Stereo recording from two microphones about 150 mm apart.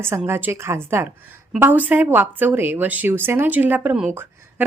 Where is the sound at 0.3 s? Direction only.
15° right (ahead or behind).